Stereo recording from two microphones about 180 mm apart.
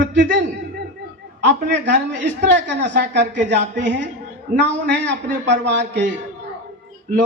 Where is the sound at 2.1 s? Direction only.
75° right (ahead or behind).